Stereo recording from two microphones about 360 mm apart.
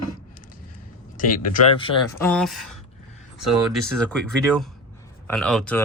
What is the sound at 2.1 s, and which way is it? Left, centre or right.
Speech, centre.